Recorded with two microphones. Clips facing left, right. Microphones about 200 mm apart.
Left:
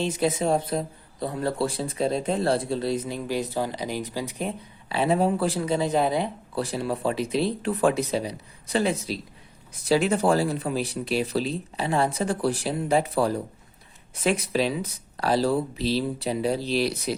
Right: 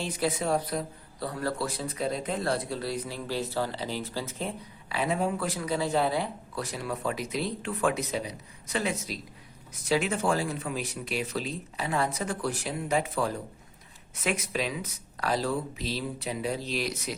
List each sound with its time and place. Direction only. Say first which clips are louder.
0.0 s a man's voice: left 5 dB; 25° left (ahead or behind)
4.9 s a man's voice: left 6 dB; 30° left (ahead or behind)
6.6 s speech: left 6 dB; 30° left (ahead or behind)